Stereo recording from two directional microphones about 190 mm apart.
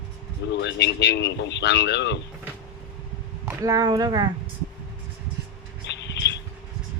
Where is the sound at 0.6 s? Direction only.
65° left (ahead or behind).